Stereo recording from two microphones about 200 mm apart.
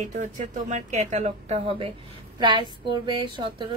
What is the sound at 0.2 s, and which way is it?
A woman's voice, 40° right (ahead or behind).